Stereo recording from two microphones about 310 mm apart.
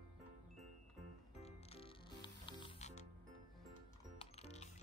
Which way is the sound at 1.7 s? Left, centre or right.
Centre.